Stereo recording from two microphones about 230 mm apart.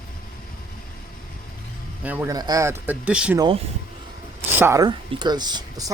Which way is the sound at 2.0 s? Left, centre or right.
Centre.